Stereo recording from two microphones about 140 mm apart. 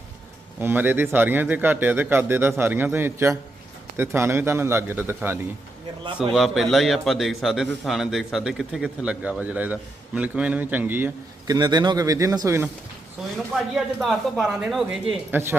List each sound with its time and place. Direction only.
0.6 s speech: 15° right (ahead or behind)
6.3 s a man's voice: centre (ahead or behind)
11.4 s a man's voice: 30° right (ahead or behind)
13.3 s a man's voice: centre (ahead or behind)
15.3 s speech: 15° right (ahead or behind)